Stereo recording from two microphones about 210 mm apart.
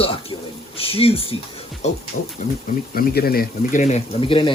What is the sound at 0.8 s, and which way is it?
Speech, 25° left (ahead or behind).